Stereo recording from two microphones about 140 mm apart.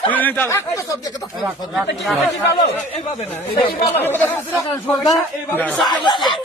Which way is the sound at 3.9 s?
15° left (ahead or behind).